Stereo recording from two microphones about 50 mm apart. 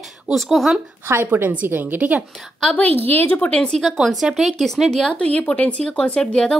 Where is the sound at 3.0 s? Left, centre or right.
Left.